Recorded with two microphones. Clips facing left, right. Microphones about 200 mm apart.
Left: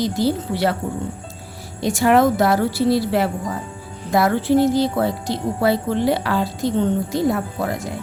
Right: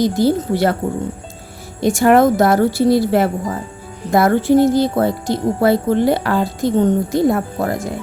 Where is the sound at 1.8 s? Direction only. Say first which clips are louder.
Right 4 dB; 50° right (ahead or behind).